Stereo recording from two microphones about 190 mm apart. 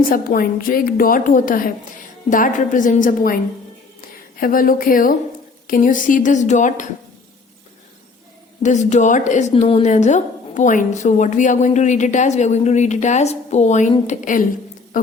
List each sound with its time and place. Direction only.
0.0 s a woman's voice: 50° left (ahead or behind)
4.4 s a woman's voice: 45° left (ahead or behind)
8.6 s a woman's voice: 40° left (ahead or behind)